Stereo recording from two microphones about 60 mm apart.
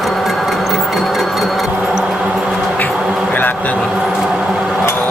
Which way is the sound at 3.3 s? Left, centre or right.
Left.